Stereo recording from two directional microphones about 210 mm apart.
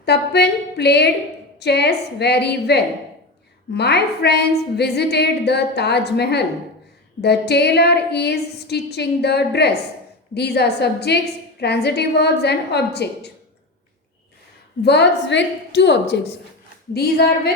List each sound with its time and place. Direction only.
0.0 s a woman's voice: 50° left (ahead or behind)
14.8 s a woman's voice: 55° left (ahead or behind)